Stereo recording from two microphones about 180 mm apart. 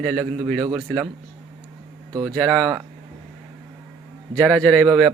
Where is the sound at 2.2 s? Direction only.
5° left (ahead or behind).